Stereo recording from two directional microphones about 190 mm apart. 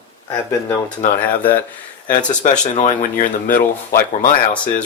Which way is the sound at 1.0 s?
50° left (ahead or behind).